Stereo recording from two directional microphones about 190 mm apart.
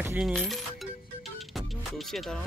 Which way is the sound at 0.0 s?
10° right (ahead or behind).